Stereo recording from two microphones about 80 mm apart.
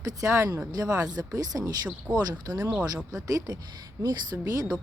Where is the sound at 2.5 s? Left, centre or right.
Right.